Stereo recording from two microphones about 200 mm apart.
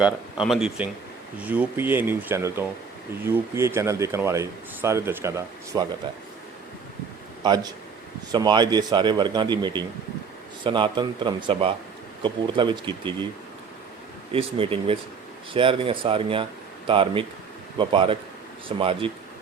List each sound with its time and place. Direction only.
0.0 s a man's voice: centre (ahead or behind); by 5.9 s 20° right (ahead or behind)
7.4 s speech: 20° right (ahead or behind)
14.3 s speech: 30° right (ahead or behind)